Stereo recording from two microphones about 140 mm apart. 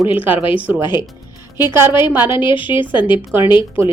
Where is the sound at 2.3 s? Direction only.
35° left (ahead or behind).